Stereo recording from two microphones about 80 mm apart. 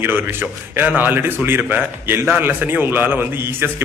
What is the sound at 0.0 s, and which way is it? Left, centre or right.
A man's voice, right.